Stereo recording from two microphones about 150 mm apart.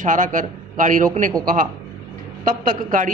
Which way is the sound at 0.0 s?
60° right (ahead or behind).